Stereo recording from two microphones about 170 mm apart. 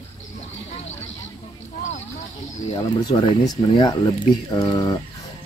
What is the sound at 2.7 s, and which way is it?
Speech, 25° left (ahead or behind).